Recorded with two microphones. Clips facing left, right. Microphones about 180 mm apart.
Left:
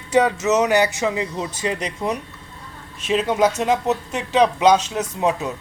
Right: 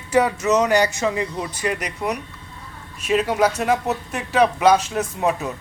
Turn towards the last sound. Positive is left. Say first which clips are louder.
# even
turn(degrees=20)  # may be behind; listen again after turning